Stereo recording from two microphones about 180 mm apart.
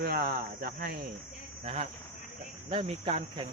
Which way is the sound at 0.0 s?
55° right (ahead or behind).